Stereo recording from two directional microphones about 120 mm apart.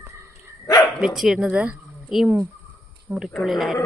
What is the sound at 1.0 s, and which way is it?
Speech, 5° right (ahead or behind).